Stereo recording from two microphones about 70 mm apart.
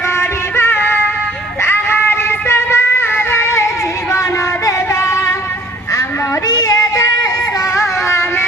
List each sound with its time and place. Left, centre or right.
0.2 s music: left
6.5 s female singing: left
7.8 s music: left